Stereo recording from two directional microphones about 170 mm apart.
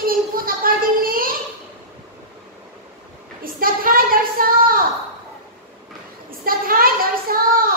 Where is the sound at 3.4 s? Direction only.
55° right (ahead or behind).